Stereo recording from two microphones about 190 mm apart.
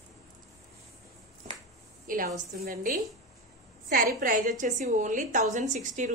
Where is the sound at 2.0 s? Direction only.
45° right (ahead or behind).